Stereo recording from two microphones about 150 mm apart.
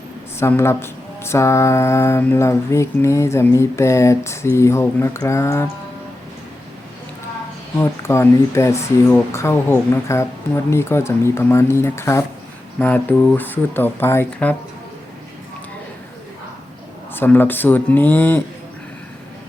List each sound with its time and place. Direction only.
0.3 s speech: 15° left (ahead or behind)
7.8 s speech: 15° left (ahead or behind)
17.2 s speech: 15° left (ahead or behind)